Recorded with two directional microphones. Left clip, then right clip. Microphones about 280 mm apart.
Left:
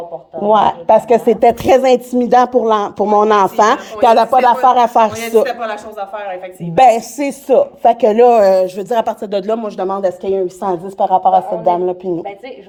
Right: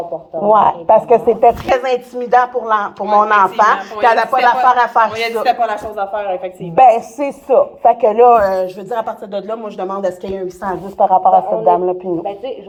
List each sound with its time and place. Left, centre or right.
0.3 s a woman's voice: left
4.0 s speech: left
4.7 s a woman's voice: left
8.5 s speech: left
10.9 s a woman's voice: left